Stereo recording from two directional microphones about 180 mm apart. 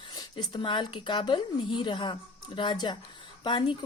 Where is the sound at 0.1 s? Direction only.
20° left (ahead or behind).